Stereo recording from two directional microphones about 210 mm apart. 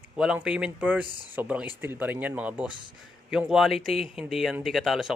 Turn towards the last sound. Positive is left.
turn(degrees=0)  # may be behind; listen again after turning